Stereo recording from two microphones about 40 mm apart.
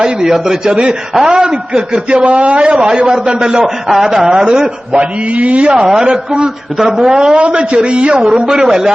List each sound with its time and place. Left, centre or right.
0.0 s a man's voice: centre
2.2 s a man's voice: right
2.7 s a man's voice: right
4.6 s a man's voice: right
5.7 s a man's voice: centre
8.4 s a man's voice: centre